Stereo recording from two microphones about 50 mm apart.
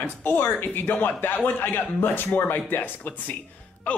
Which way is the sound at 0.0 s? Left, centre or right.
Left.